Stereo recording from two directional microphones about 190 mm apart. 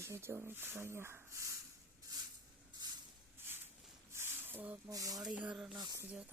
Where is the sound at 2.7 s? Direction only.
25° right (ahead or behind).